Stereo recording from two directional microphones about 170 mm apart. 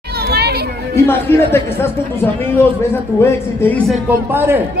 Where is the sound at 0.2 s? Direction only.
70° right (ahead or behind).